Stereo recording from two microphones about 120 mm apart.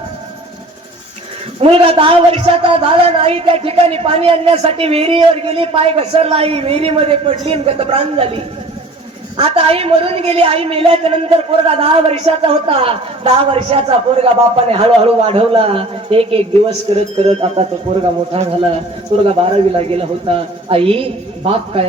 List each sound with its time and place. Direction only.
1.6 s a woman's voice: 50° right (ahead or behind)
9.4 s a woman's voice: 55° right (ahead or behind)